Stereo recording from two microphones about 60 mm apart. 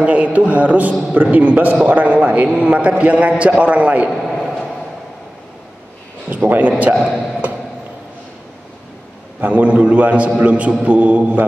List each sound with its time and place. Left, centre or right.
0.0 s a man's voice: right
4.1 s a sound: centre
6.2 s a man's voice: right
7.0 s speech: centre
9.4 s a man's voice: right